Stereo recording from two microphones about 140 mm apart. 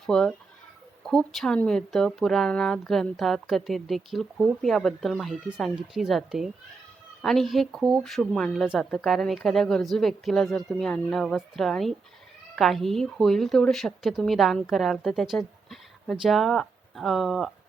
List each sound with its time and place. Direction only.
0.0 s speech: 5° left (ahead or behind)